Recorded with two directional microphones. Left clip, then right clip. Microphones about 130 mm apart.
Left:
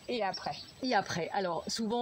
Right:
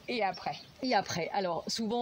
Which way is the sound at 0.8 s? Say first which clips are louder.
Right 1 dB; 20° right (ahead or behind).